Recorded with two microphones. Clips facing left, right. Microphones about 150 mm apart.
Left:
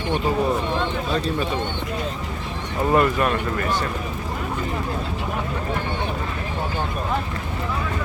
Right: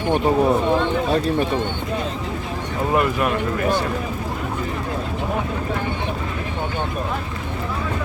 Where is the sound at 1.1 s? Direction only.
60° right (ahead or behind).